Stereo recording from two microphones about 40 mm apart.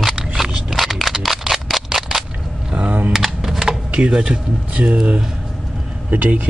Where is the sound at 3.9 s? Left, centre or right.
Right.